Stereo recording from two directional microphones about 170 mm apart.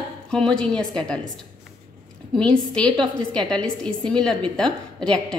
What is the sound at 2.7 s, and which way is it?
A woman's voice, 5° left (ahead or behind).